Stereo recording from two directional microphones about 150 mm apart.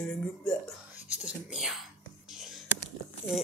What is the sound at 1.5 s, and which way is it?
Speech, 5° right (ahead or behind).